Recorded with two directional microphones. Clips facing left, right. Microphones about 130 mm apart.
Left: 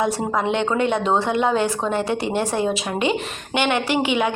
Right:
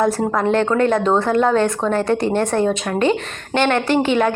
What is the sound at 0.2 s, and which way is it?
Speech, 5° left (ahead or behind).